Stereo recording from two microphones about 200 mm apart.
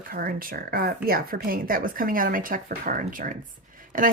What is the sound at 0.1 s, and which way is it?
Speech, 45° right (ahead or behind).